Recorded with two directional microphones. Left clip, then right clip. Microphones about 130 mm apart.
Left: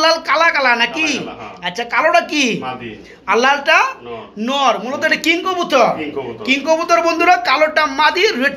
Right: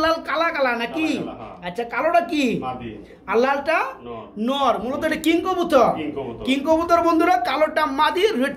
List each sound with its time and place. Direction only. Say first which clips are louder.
0.0 s a man's voice: left 7 dB; 5° right (ahead or behind); by 8.5 s 25° right (ahead or behind)